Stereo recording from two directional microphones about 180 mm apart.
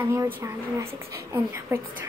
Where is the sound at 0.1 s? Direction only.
15° right (ahead or behind).